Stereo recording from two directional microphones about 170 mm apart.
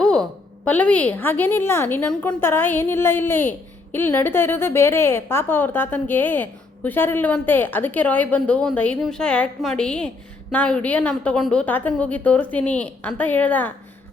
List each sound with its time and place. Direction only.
0.0 s a woman's voice: 5° left (ahead or behind)